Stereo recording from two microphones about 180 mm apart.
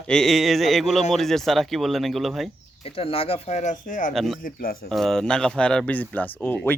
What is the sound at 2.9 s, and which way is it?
Speech, 30° left (ahead or behind).